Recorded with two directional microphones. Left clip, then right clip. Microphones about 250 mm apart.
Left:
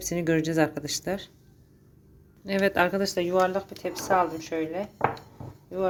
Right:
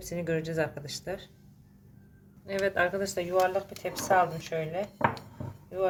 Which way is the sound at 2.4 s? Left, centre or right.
Left.